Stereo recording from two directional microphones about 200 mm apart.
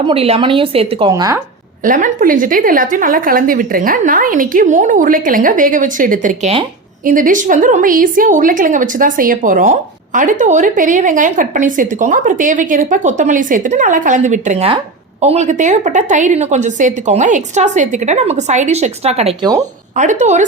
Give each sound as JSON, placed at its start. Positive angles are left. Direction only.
{"t": 0.1, "sound": "a woman's voice", "side_deg": -30}
{"t": 1.8, "sound": "a woman's voice", "side_deg": -40}